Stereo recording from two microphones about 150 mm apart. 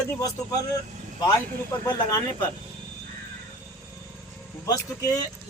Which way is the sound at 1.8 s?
30° left (ahead or behind).